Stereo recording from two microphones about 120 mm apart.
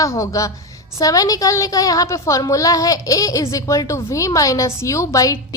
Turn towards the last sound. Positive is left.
turn(degrees=30)  # may be behind; listen again after turning